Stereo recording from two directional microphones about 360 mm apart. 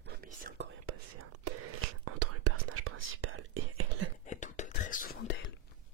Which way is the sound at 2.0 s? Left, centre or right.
Right.